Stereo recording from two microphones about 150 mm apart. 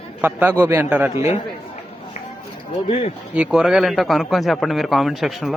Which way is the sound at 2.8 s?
35° left (ahead or behind).